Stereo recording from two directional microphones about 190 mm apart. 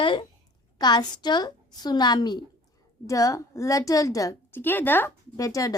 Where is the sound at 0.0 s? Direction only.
25° left (ahead or behind).